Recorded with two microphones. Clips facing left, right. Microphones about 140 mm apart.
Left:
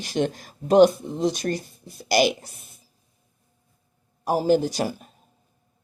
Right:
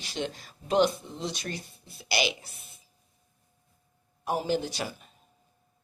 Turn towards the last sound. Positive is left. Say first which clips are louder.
# left 9 dB
turn(degrees=45)  # may be behind; listen again after turning